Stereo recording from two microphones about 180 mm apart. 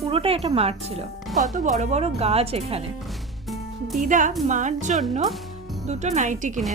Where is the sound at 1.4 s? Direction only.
45° right (ahead or behind).